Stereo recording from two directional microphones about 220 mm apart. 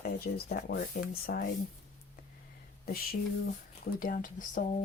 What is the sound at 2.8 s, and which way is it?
Speech, 45° left (ahead or behind).